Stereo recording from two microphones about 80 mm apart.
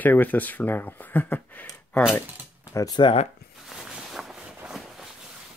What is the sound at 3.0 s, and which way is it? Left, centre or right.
Speech, left.